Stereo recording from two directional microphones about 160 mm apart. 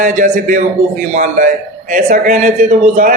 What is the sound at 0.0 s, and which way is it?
A man's voice, 55° right (ahead or behind).